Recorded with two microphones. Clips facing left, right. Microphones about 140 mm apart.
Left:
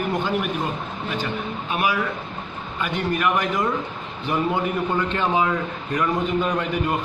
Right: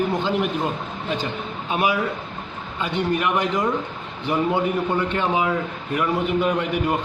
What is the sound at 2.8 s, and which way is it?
A man's voice, 20° right (ahead or behind).